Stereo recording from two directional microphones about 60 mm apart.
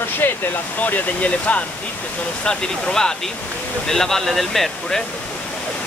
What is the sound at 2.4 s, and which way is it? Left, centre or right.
Speech, centre.